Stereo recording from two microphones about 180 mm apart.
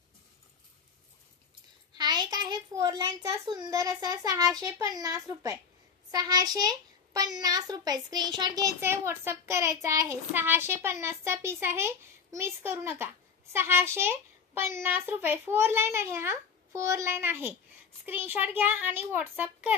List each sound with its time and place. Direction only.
2.0 s a child's voice: 20° right (ahead or behind)